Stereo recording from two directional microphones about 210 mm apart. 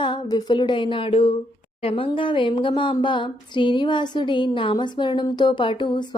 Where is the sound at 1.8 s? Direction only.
25° left (ahead or behind).